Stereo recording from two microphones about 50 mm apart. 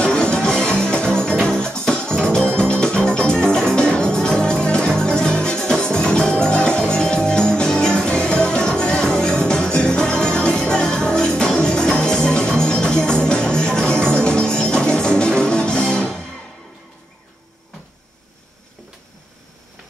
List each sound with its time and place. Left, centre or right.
0.0 s music: centre